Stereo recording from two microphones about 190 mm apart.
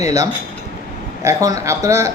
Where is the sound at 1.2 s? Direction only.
15° right (ahead or behind).